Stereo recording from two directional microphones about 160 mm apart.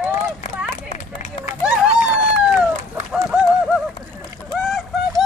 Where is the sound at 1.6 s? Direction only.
5° right (ahead or behind).